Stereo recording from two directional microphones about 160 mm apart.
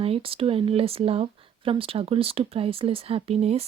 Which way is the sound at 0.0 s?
35° right (ahead or behind).